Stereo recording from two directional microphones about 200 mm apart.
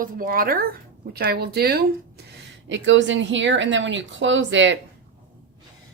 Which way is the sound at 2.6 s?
65° right (ahead or behind).